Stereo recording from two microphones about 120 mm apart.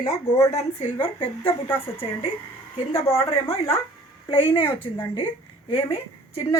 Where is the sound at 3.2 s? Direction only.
55° left (ahead or behind).